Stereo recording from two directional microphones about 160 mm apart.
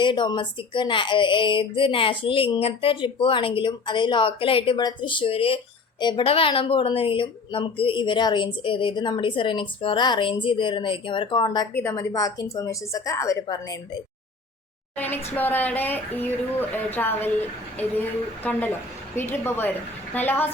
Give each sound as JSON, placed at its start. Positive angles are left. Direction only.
{"t": 0.0, "sound": "a woman's voice", "side_deg": 30}
{"t": 11.7, "sound": "speech", "side_deg": 15}
{"t": 14.9, "sound": "speech", "side_deg": 10}